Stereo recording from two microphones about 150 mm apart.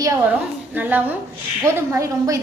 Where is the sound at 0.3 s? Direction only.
10° right (ahead or behind).